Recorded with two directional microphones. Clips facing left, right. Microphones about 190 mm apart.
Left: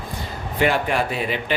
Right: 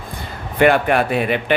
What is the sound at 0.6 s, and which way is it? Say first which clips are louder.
Speech: right 6 dB; 60° right (ahead or behind).